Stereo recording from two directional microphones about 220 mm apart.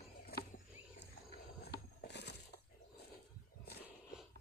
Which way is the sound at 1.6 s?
50° left (ahead or behind).